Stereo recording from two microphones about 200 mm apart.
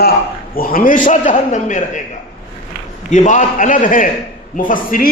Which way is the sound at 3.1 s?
40° left (ahead or behind).